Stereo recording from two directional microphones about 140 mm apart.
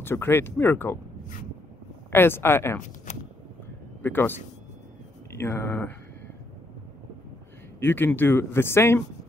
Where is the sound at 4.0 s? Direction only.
15° left (ahead or behind).